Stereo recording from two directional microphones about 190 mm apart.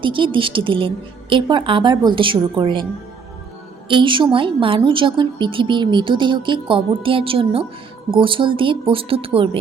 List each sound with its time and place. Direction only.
0.0 s a woman's voice: 25° right (ahead or behind)
3.8 s a woman's voice: 25° right (ahead or behind)